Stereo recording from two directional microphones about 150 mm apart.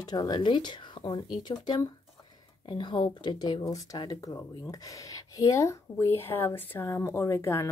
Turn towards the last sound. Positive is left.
turn(degrees=15)  # may be behind; listen again after turning